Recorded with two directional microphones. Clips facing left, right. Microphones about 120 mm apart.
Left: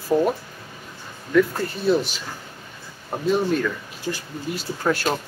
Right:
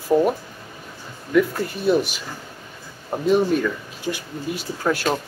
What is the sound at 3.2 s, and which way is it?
Speech, 15° right (ahead or behind).